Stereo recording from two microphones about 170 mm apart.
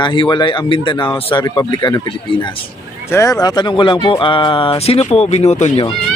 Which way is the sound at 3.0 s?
20° left (ahead or behind).